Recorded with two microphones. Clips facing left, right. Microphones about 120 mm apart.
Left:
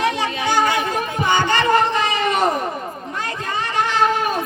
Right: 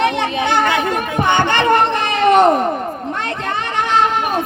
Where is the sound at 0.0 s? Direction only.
65° right (ahead or behind).